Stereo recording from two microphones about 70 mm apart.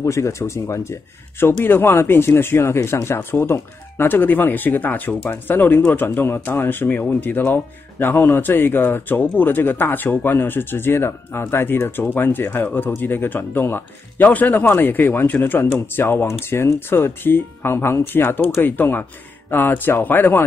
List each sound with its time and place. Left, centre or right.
0.0 s speech: left